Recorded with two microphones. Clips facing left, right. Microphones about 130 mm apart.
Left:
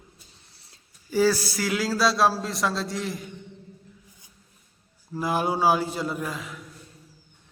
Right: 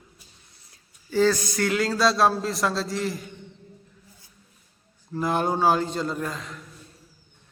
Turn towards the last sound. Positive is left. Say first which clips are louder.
# right 1 dB
turn(degrees=5)  # may be behind; listen again after turning